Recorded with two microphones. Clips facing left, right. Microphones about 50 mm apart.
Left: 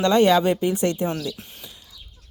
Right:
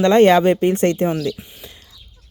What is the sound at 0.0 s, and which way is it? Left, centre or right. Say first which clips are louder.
Speech: right 5 dB; right.